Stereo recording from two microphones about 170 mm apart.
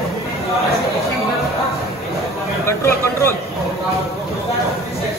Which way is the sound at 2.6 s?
15° left (ahead or behind).